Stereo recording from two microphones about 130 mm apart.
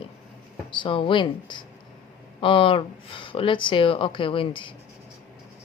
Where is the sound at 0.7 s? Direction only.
40° left (ahead or behind).